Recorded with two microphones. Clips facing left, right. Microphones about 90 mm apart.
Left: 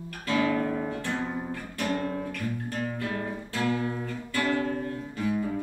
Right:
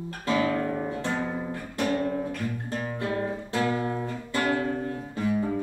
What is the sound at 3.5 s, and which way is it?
Music, 35° right (ahead or behind).